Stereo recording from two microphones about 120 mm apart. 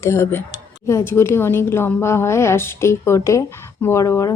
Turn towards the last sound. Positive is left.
turn(degrees=25)  # may be behind; listen again after turning